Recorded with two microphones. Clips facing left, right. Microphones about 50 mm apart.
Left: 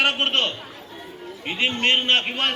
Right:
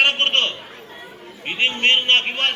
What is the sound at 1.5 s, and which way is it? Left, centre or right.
A man's voice, right.